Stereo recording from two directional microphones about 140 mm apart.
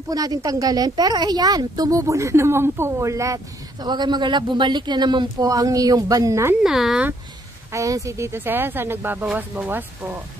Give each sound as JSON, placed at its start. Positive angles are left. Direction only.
{"t": 0.1, "sound": "a woman's voice", "side_deg": -25}
{"t": 6.6, "sound": "speech", "side_deg": 0}
{"t": 7.7, "sound": "speech", "side_deg": -25}